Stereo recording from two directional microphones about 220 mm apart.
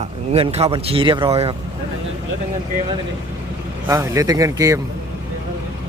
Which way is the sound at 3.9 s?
15° right (ahead or behind).